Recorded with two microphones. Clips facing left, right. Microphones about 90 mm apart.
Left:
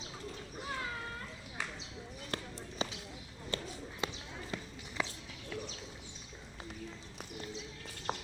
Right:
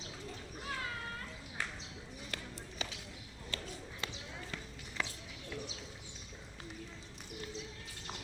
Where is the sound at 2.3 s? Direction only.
35° left (ahead or behind).